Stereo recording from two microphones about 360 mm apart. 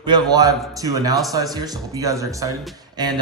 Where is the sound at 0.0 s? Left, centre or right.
Centre.